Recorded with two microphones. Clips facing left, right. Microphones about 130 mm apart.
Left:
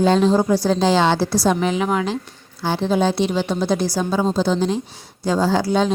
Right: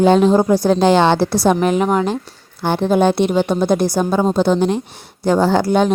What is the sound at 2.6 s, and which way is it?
A woman's voice, 55° right (ahead or behind).